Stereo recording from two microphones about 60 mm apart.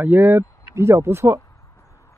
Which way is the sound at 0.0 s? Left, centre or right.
Right.